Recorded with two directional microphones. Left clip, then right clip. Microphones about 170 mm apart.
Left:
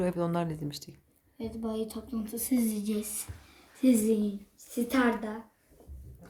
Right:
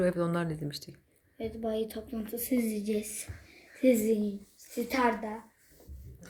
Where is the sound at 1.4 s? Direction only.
30° left (ahead or behind).